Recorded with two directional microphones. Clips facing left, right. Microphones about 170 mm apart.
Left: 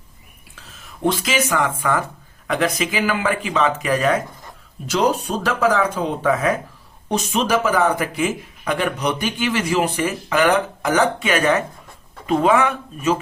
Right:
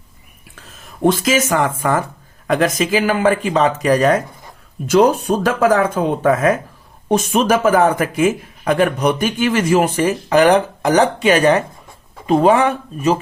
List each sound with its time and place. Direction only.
0.5 s speech: 50° right (ahead or behind)
4.9 s speech: 50° right (ahead or behind); by 13.1 s 35° right (ahead or behind)